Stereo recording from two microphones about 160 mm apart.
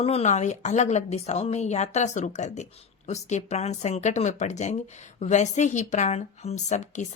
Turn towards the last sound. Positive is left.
turn(degrees=45)  # may be behind; listen again after turning